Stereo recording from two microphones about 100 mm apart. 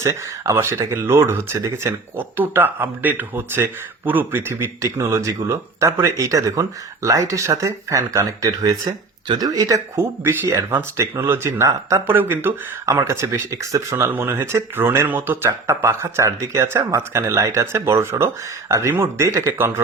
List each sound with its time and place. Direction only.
0.0 s speech: 30° right (ahead or behind)
12.0 s speech: 20° right (ahead or behind)